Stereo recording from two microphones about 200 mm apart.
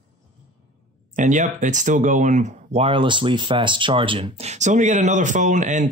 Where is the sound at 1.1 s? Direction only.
40° right (ahead or behind).